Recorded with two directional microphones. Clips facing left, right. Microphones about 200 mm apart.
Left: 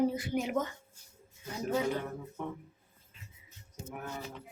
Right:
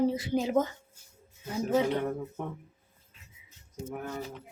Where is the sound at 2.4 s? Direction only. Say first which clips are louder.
Right 1 dB; 50° right (ahead or behind).